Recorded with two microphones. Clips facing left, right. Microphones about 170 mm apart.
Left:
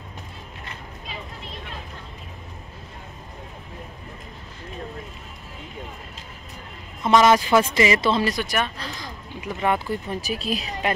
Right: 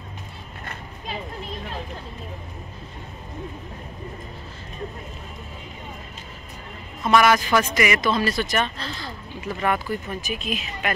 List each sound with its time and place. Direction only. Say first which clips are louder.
7.0 s speech: left 1 dB; 20° left (ahead or behind)